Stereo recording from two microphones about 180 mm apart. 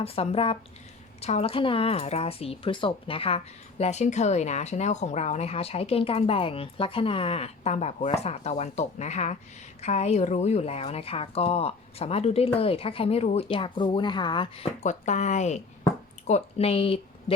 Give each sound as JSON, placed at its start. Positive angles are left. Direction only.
{"t": 0.0, "sound": "speech", "side_deg": 35}